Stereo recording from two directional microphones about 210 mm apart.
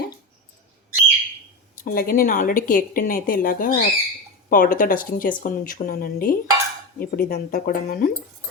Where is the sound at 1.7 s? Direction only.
45° left (ahead or behind).